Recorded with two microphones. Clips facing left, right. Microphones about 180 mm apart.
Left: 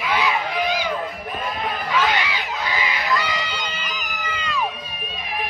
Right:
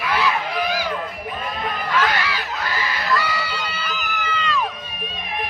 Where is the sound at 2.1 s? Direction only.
15° left (ahead or behind).